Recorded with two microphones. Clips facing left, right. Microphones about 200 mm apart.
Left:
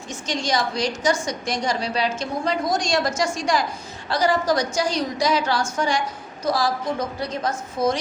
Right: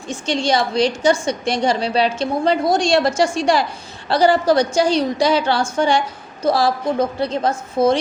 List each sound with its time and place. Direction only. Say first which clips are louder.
0.1 s a woman's voice: right 6 dB; 30° right (ahead or behind)